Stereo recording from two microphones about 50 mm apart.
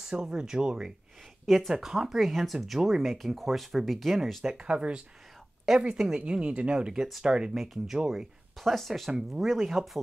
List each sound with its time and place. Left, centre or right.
0.0 s speech: centre
1.4 s speech: centre
4.6 s speech: centre
6.9 s speech: centre
7.2 s speech: centre
7.5 s speech: centre
8.5 s speech: centre